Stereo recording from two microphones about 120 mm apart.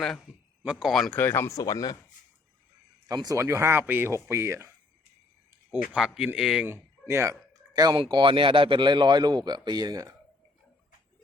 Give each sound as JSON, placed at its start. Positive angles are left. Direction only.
{"t": 0.3, "sound": "a man's voice", "side_deg": -10}
{"t": 1.1, "sound": "speech", "side_deg": 20}
{"t": 3.1, "sound": "speech", "side_deg": -30}
{"t": 5.7, "sound": "speech", "side_deg": -5}
{"t": 7.1, "sound": "speech", "side_deg": -25}